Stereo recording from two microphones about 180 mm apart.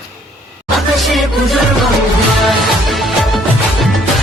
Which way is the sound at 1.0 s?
Centre (ahead or behind).